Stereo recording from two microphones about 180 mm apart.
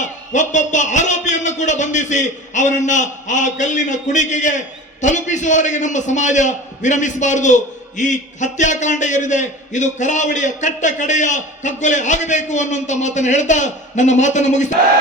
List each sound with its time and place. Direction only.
0.3 s a man's voice: 40° left (ahead or behind)